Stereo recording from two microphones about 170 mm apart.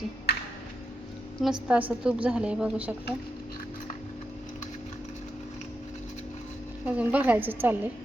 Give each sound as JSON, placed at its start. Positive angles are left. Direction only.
{"t": 0.3, "sound": "music", "side_deg": 70}
{"t": 1.4, "sound": "a woman's voice", "side_deg": -5}
{"t": 6.8, "sound": "a woman's voice", "side_deg": -10}